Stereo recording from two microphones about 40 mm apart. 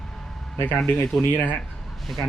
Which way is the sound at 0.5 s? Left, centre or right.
Left.